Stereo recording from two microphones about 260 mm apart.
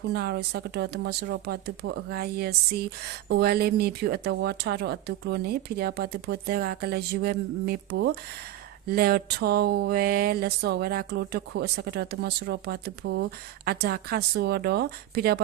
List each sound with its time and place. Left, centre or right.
0.1 s speech: right